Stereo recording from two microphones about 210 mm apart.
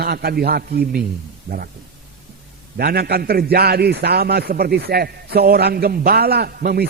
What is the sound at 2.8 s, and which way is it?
A man's voice, 50° right (ahead or behind).